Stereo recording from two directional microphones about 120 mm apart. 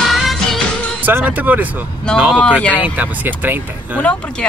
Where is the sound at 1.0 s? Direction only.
15° right (ahead or behind).